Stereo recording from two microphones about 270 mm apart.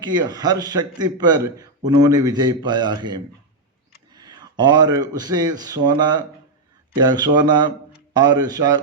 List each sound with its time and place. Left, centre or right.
0.0 s a man's voice: centre